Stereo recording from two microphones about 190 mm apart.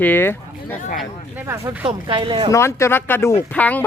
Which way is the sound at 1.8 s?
25° right (ahead or behind).